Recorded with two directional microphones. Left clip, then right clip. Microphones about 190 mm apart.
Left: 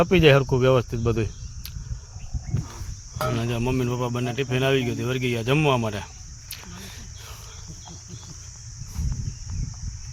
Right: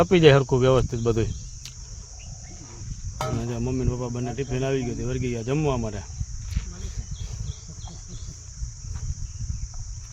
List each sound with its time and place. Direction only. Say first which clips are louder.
0.0 s speech: right 1 dB; 5° right (ahead or behind)
3.2 s speech: left 5 dB; 5° left (ahead or behind)